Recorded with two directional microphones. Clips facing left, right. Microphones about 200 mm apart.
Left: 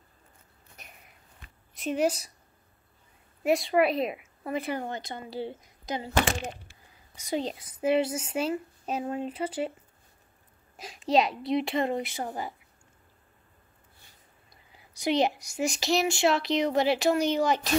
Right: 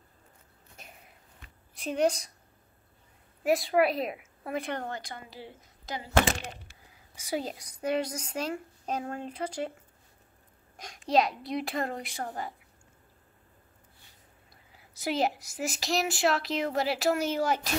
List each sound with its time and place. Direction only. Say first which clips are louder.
1.8 s a child's voice: even; 5° left (ahead or behind)
3.4 s a child's voice: left 1 dB; centre (ahead or behind)
4.8 s a woman's voice: left 3 dB; 20° left (ahead or behind)
7.2 s a child's voice: left 2 dB; 5° right (ahead or behind)
10.8 s a child's voice: left 1 dB; 5° left (ahead or behind)
14.5 s a child's voice: left 3 dB; 5° right (ahead or behind)